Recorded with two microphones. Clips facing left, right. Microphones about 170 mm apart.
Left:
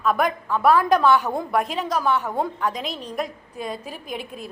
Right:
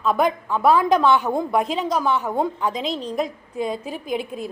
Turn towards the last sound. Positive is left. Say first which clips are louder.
# right 6 dB
turn(degrees=-25)  # may be behind; listen again after turning